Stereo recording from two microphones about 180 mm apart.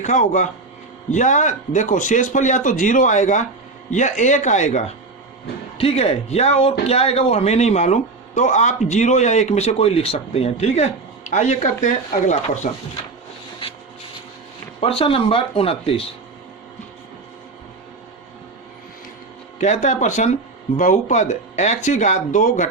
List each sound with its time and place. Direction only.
0.0 s a man's voice: 45° left (ahead or behind)
14.8 s a man's voice: 30° left (ahead or behind)
19.5 s a man's voice: 40° left (ahead or behind)